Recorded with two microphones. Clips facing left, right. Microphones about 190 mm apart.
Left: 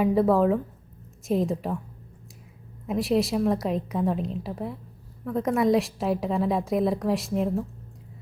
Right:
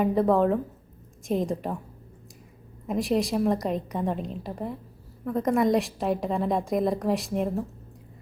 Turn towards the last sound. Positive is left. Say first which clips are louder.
# left 1 dB
turn(degrees=0)  # may be behind; listen again after turning